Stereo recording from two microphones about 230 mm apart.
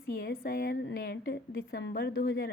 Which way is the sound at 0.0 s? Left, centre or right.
Left.